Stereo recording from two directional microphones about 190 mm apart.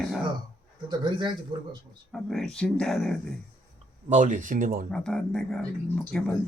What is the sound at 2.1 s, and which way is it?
Speech, centre (ahead or behind).